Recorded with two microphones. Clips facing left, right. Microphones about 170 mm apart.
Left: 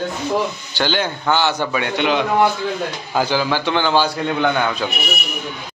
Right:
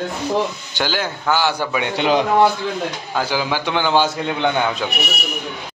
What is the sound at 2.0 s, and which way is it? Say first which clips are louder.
Speech: right 2 dB; 35° right (ahead or behind).